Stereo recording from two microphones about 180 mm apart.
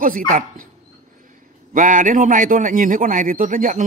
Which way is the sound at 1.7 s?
50° right (ahead or behind).